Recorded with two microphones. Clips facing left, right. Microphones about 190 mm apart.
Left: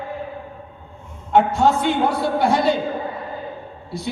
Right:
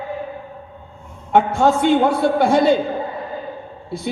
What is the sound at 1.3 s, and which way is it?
Speech, 55° right (ahead or behind).